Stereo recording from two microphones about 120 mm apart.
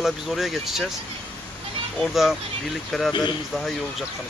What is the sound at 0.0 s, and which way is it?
Speech, centre (ahead or behind).